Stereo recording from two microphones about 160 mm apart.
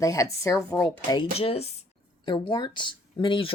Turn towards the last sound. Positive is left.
turn(degrees=30)  # may be behind; listen again after turning